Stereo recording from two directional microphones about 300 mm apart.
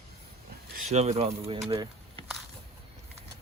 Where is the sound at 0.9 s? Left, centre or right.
Right.